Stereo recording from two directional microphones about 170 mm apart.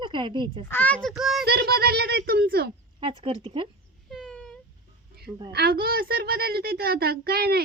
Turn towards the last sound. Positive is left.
turn(degrees=-65)  # may be behind; listen again after turning